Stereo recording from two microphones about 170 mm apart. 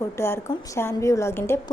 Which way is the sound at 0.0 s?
15° left (ahead or behind).